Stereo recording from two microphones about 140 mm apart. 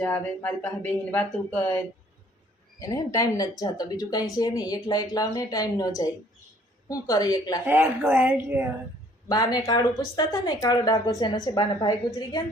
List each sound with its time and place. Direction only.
0.0 s speech: 10° left (ahead or behind)
2.7 s speech: 20° left (ahead or behind)
7.6 s a woman's voice: 15° right (ahead or behind)
9.3 s a woman's voice: 25° left (ahead or behind)